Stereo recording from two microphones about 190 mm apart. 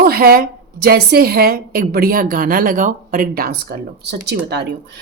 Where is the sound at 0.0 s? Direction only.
50° right (ahead or behind).